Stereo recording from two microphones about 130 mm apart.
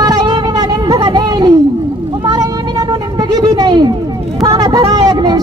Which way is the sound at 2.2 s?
30° right (ahead or behind).